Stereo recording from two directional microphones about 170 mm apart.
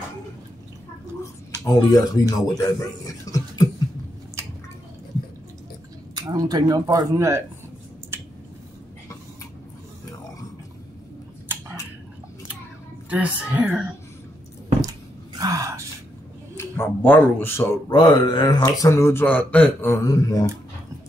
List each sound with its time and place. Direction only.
1.7 s speech: 20° left (ahead or behind)
6.3 s speech: 20° right (ahead or behind)
13.1 s speech: 10° right (ahead or behind)
14.8 s a sound: 20° right (ahead or behind)
16.5 s speech: 15° left (ahead or behind)
17.8 s speech: 25° left (ahead or behind)